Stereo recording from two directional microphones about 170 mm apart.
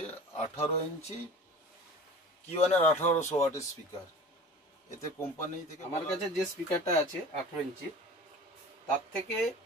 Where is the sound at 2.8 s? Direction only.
15° left (ahead or behind).